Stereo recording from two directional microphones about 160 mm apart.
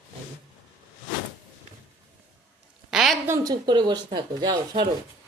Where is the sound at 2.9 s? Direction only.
5° right (ahead or behind).